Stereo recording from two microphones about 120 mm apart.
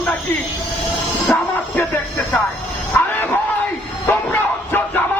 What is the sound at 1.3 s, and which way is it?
Music, 20° left (ahead or behind).